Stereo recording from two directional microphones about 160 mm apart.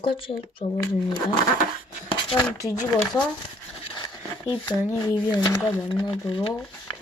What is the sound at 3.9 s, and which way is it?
Speech, 30° left (ahead or behind).